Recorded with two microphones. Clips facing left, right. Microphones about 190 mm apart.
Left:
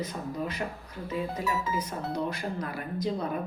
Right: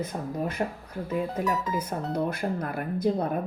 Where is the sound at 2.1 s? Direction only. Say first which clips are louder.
Right 5 dB; 55° right (ahead or behind).